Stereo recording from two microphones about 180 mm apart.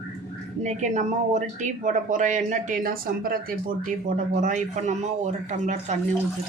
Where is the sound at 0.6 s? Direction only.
40° right (ahead or behind).